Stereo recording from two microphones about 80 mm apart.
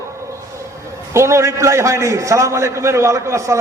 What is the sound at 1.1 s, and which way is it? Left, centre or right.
A man's voice, right.